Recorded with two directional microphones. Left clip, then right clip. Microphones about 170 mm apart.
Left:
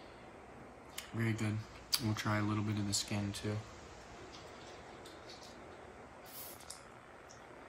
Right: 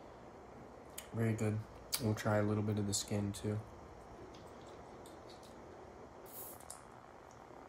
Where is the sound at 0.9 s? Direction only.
Centre (ahead or behind).